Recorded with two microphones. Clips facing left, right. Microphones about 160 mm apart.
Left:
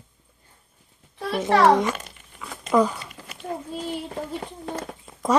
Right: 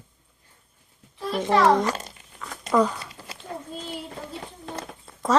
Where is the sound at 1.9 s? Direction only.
30° right (ahead or behind).